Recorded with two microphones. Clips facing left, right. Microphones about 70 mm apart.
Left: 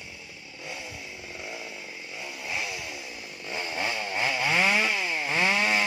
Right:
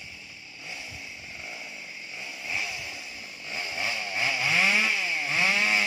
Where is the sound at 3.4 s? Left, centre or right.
Left.